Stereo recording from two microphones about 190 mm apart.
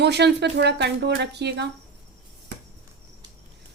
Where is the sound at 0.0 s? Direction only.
60° right (ahead or behind).